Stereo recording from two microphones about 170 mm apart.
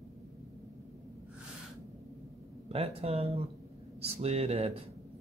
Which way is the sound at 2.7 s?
35° right (ahead or behind).